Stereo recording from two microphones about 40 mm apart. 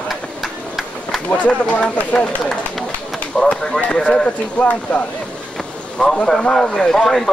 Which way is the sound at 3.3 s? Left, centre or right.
Centre.